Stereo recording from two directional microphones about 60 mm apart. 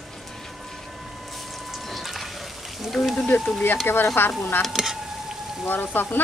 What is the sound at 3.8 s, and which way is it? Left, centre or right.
Speech, left.